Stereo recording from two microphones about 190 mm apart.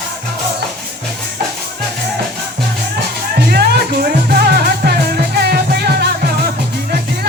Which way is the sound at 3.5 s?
55° right (ahead or behind).